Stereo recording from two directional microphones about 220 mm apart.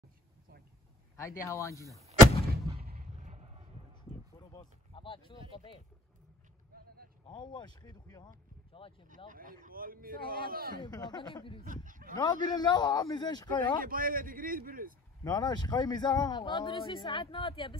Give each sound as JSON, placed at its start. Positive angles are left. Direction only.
{"t": 1.1, "sound": "a man's voice", "side_deg": 15}
{"t": 3.0, "sound": "a sound", "side_deg": -30}
{"t": 4.4, "sound": "a sound", "side_deg": 20}
{"t": 7.2, "sound": "speech", "side_deg": 20}
{"t": 9.3, "sound": "speech", "side_deg": -35}
{"t": 10.8, "sound": "speech", "side_deg": 20}
{"t": 11.6, "sound": "speech", "side_deg": -35}
{"t": 12.2, "sound": "speech", "side_deg": 20}
{"t": 13.7, "sound": "speech", "side_deg": -40}
{"t": 15.2, "sound": "speech", "side_deg": 15}